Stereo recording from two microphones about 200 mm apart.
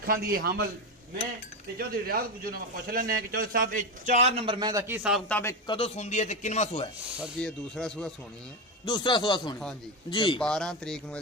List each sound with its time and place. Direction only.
0.0 s a man's voice: 50° right (ahead or behind)
1.8 s a man's voice: 50° right (ahead or behind); by 5.2 s 5° right (ahead or behind)
5.3 s a man's voice: 10° left (ahead or behind)
5.7 s speech: 30° left (ahead or behind)
7.2 s speech: centre (ahead or behind)
8.8 s speech: 20° left (ahead or behind)
10.4 s speech: 5° left (ahead or behind)